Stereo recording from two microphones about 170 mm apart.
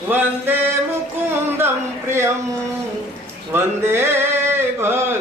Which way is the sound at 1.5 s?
15° right (ahead or behind).